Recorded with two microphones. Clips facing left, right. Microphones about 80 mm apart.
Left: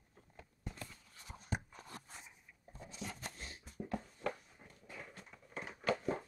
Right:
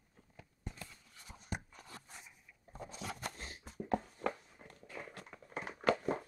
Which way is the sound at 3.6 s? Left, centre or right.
Right.